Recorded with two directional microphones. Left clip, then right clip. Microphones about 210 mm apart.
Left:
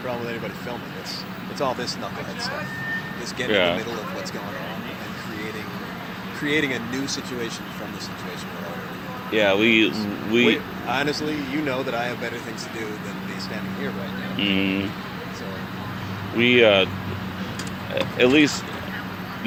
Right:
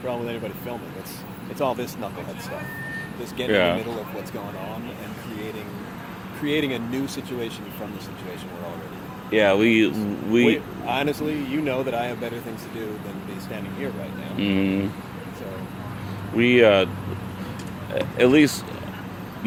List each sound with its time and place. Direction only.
1.5 s speech: 45° right (ahead or behind)
3.5 s speech: 20° right (ahead or behind)
6.4 s speech: 45° right (ahead or behind)
9.3 s speech: 25° right (ahead or behind)
10.8 s speech: 45° right (ahead or behind)
14.3 s speech: 20° right (ahead or behind)
16.4 s speech: 20° right (ahead or behind)
17.9 s speech: 20° right (ahead or behind)